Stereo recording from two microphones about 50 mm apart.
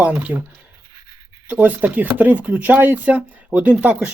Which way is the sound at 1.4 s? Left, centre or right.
Right.